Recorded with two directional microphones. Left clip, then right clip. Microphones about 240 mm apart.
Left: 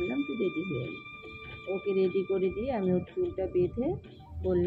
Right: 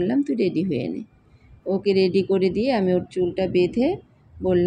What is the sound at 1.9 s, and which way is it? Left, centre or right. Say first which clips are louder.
Speech: right 8 dB; right.